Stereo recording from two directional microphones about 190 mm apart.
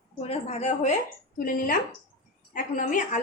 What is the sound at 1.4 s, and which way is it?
A woman's voice, 45° left (ahead or behind).